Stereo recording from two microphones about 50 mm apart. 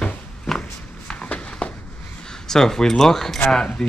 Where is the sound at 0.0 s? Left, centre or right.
Centre.